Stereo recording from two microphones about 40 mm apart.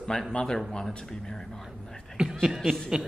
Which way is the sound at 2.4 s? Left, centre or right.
Centre.